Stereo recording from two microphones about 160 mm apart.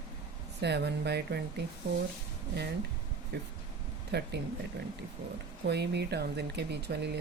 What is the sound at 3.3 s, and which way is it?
Speech, 90° right.